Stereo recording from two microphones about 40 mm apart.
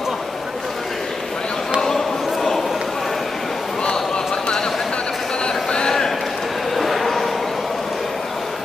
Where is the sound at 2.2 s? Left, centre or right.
Centre.